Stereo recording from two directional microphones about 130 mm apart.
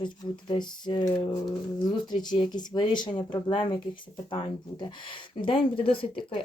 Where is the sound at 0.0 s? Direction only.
35° left (ahead or behind).